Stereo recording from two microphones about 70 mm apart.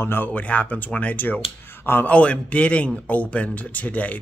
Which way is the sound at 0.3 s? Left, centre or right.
Centre.